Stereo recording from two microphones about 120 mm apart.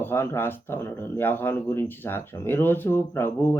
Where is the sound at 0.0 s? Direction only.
20° left (ahead or behind).